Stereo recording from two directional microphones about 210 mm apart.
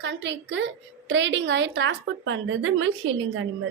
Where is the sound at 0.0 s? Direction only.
55° right (ahead or behind); by 2.9 s 75° right (ahead or behind).